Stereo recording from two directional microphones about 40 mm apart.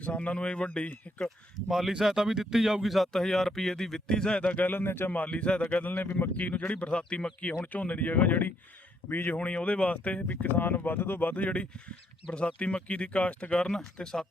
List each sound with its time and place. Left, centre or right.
0.0 s speech: left
1.6 s speech: centre
3.1 s speech: centre
4.4 s speech: left
4.6 s a man's voice: left
5.3 s speech: left
7.6 s speech: left
9.0 s a man's voice: left
9.4 s speech: left
10.4 s speech: left; by 14.3 s centre